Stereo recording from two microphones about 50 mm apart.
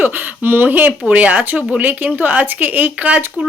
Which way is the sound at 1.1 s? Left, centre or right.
Right.